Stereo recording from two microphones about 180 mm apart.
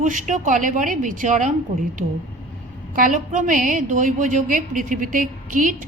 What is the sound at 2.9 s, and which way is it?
A woman's voice, 45° right (ahead or behind).